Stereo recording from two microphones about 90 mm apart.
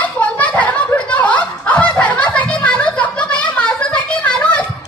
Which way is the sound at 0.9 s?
15° left (ahead or behind).